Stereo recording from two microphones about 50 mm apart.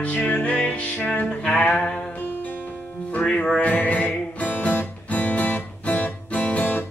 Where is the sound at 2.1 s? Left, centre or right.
Left.